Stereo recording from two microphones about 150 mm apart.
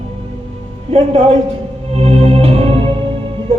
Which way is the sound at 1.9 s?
40° right (ahead or behind).